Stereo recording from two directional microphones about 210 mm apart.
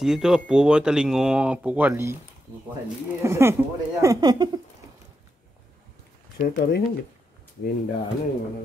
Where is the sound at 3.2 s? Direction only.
10° right (ahead or behind).